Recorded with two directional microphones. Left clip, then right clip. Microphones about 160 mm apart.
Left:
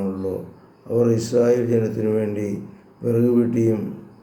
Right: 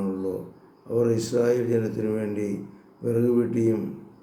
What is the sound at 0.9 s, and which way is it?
Speech, 10° left (ahead or behind).